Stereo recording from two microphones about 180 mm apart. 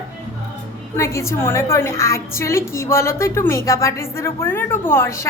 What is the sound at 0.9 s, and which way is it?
A woman's voice, 15° left (ahead or behind).